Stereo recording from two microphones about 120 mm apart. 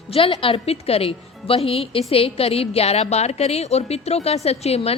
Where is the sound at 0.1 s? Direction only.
50° left (ahead or behind).